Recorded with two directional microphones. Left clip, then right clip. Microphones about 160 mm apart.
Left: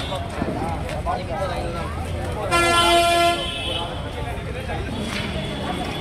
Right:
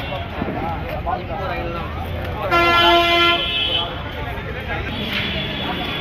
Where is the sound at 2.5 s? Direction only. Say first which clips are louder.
Right 3 dB; 75° left (ahead or behind).